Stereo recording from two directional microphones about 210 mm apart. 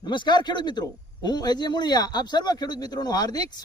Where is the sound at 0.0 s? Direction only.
20° left (ahead or behind).